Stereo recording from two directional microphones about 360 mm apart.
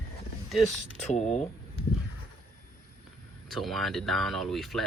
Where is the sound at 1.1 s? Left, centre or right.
Centre.